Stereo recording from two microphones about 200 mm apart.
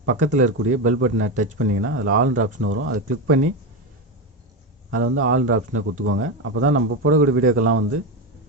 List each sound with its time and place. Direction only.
0.3 s a man's voice: 80° right
4.9 s a man's voice: 90° right